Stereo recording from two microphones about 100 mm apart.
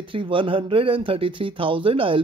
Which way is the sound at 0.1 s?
60° right (ahead or behind).